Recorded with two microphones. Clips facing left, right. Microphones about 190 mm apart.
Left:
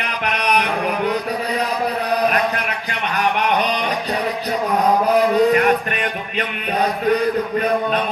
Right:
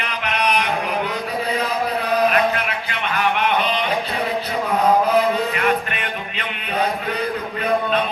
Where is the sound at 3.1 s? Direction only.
40° left (ahead or behind).